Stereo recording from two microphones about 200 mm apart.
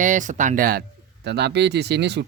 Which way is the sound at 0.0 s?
40° right (ahead or behind).